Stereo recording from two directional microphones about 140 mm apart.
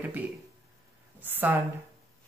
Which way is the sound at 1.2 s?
15° right (ahead or behind).